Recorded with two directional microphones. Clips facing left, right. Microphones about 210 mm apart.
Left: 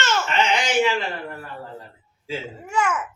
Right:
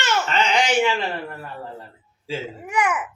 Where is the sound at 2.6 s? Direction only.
15° right (ahead or behind).